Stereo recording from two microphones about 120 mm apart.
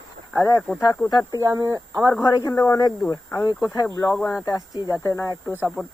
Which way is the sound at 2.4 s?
25° left (ahead or behind).